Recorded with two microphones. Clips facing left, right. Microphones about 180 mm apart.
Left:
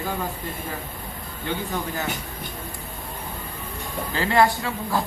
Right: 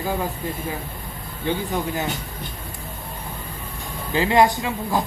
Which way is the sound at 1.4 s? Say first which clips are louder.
Right 4 dB; 20° right (ahead or behind).